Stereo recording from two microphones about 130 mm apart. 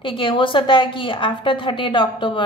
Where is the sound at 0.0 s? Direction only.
40° left (ahead or behind).